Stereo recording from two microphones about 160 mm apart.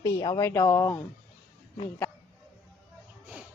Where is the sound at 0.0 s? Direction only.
20° left (ahead or behind).